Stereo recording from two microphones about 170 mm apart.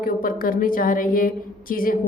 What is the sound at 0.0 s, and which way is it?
A woman's voice, 55° left (ahead or behind).